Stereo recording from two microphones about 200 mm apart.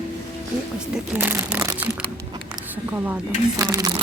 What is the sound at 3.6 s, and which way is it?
Speech, 15° right (ahead or behind).